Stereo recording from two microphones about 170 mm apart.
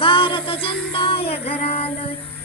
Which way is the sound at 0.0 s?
30° left (ahead or behind).